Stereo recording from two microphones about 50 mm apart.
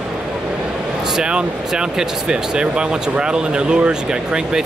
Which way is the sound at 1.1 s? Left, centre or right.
Centre.